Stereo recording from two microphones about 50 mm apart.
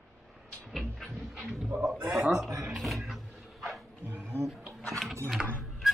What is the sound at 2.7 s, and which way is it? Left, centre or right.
Music, centre.